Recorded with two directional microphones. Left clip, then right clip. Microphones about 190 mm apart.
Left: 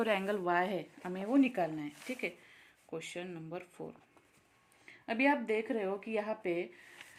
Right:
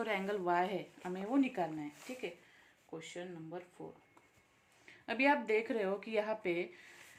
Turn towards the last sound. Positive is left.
turn(degrees=10)  # may be behind; listen again after turning